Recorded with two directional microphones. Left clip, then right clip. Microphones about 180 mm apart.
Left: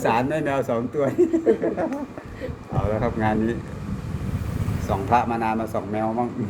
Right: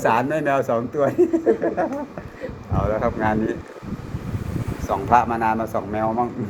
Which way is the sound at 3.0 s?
25° left (ahead or behind).